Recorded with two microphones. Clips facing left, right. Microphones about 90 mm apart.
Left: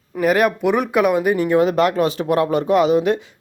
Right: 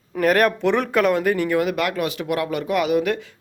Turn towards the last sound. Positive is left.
turn(degrees=25)  # may be behind; listen again after turning